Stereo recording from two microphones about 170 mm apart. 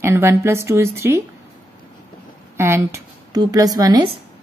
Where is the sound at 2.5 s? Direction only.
15° right (ahead or behind).